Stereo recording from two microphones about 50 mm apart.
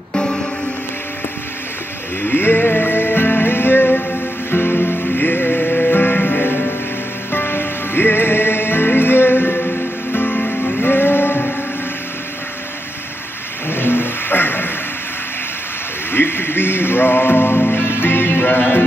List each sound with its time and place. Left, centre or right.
0.1 s music: centre
2.2 s music: left
13.7 s a sound: left
16.1 s music: left